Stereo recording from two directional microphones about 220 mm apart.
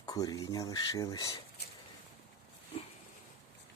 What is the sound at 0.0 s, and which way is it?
Speech, 15° left (ahead or behind).